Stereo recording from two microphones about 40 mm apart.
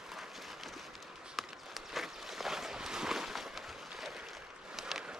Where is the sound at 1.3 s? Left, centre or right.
Centre.